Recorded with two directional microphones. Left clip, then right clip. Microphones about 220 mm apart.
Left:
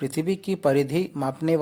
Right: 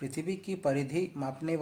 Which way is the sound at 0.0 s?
40° left (ahead or behind).